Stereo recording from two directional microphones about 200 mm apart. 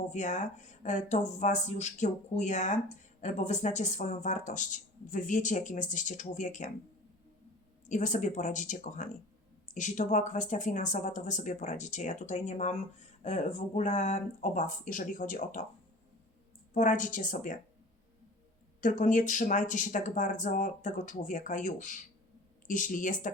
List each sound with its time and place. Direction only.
0.1 s speech: 35° left (ahead or behind)
7.9 s speech: 40° left (ahead or behind)
16.7 s speech: 40° left (ahead or behind)
18.8 s speech: 40° left (ahead or behind)